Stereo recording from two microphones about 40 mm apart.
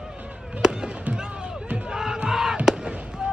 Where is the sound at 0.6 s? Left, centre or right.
Centre.